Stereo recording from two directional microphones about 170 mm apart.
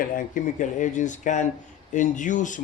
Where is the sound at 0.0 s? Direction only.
50° left (ahead or behind).